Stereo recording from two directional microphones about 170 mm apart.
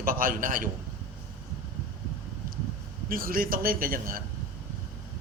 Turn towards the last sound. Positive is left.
turn(degrees=-55)  # may be behind; listen again after turning